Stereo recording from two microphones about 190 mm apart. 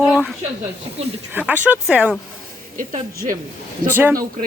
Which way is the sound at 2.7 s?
45° right (ahead or behind).